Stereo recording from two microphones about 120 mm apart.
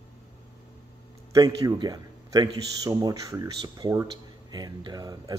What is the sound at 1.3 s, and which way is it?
A man's voice, 30° right (ahead or behind).